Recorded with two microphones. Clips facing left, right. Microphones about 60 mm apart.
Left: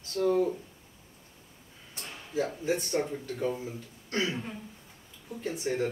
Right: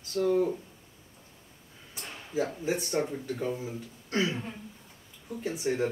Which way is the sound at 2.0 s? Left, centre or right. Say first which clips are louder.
Right 1 dB; centre.